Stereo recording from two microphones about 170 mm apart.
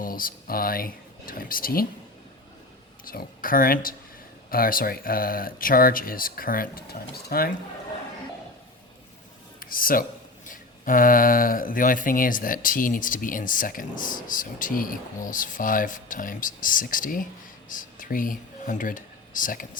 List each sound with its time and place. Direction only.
0.0 s speech: 55° left (ahead or behind)
3.0 s speech: 55° left (ahead or behind)
9.6 s speech: 55° left (ahead or behind)